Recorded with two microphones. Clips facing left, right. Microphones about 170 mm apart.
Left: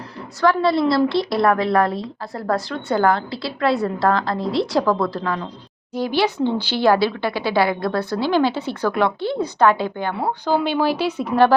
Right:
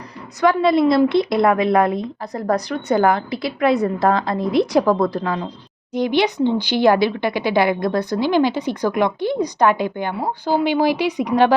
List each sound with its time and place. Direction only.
0.4 s a woman's voice: 20° right (ahead or behind)